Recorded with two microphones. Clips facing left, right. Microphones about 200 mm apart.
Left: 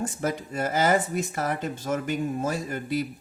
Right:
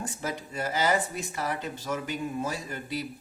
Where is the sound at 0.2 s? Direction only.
50° left (ahead or behind).